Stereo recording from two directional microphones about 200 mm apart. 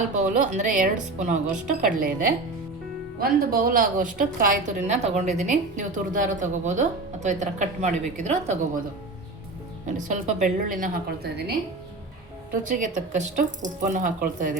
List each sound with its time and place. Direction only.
0.1 s a woman's voice: 40° right (ahead or behind)
9.8 s a woman's voice: 40° right (ahead or behind)
12.6 s a woman's voice: 40° right (ahead or behind)